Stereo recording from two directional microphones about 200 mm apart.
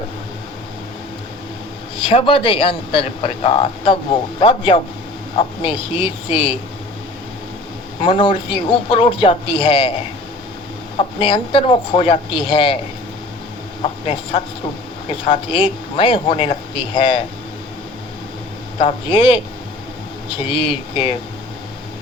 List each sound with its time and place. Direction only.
2.0 s speech: 25° left (ahead or behind)
8.0 s speech: 25° left (ahead or behind)
10.9 s speech: 25° left (ahead or behind)
13.8 s speech: 25° left (ahead or behind)
18.8 s speech: 25° left (ahead or behind)
20.5 s speech: 25° left (ahead or behind)